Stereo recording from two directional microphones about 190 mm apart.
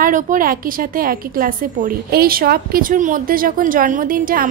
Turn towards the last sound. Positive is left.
turn(degrees=-45)  # may be behind; listen again after turning